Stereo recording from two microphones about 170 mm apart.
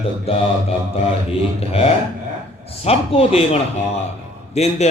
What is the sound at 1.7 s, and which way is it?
Speech, 40° left (ahead or behind).